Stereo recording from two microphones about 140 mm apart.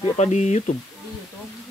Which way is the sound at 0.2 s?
55° left (ahead or behind).